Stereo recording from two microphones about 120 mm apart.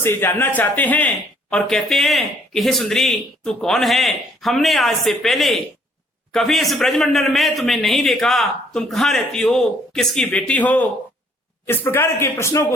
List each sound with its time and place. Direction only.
0.0 s speech: 20° left (ahead or behind)